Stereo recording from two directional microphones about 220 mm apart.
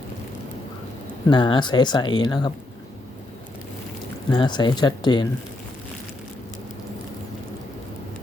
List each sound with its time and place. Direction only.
1.3 s speech: 20° left (ahead or behind)
4.3 s speech: 20° left (ahead or behind)